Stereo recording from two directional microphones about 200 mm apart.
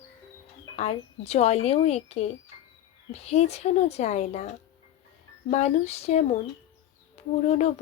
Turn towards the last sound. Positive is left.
turn(degrees=35)  # may be behind; listen again after turning